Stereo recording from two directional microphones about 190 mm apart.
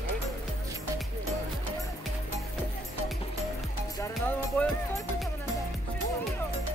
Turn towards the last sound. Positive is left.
turn(degrees=10)  # may be behind; listen again after turning